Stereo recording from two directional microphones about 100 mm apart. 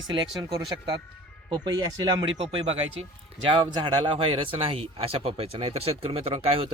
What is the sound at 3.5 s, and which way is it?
Speech, 55° right (ahead or behind).